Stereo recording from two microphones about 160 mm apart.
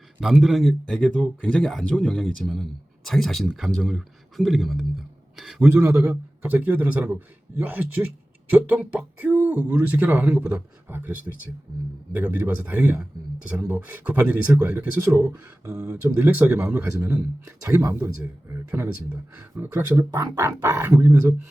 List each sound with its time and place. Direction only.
0.2 s a man's voice: 5° right (ahead or behind); by 21.3 s 20° right (ahead or behind)